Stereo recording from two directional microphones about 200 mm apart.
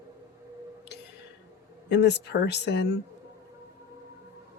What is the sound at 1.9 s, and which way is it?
Speech, 60° left (ahead or behind).